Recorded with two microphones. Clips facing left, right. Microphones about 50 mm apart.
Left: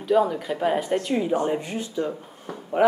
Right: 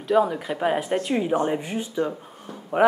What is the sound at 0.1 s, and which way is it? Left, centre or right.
Speech, centre.